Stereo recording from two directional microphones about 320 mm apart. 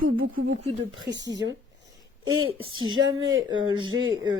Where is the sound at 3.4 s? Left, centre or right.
Centre.